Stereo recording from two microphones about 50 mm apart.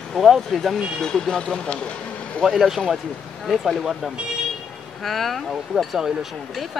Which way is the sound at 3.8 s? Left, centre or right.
Centre.